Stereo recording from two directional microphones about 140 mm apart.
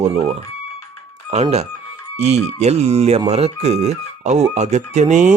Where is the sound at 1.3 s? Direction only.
50° right (ahead or behind).